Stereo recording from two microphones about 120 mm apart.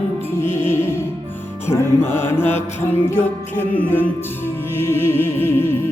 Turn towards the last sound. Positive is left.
turn(degrees=20)  # may be behind; listen again after turning